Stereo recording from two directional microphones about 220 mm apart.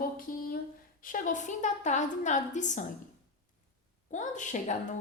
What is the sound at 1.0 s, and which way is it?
A woman's voice, 35° left (ahead or behind).